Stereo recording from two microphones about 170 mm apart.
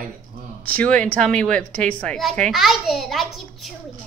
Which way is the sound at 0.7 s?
5° left (ahead or behind).